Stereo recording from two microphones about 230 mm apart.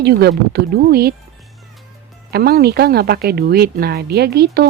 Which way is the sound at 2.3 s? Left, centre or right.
Right.